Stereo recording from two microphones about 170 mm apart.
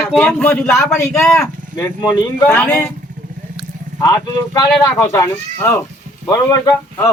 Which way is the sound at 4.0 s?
20° left (ahead or behind).